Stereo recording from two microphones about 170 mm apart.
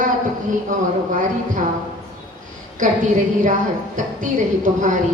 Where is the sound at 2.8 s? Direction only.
50° right (ahead or behind).